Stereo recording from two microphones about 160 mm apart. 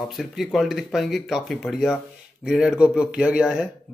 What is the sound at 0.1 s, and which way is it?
Speech, centre (ahead or behind).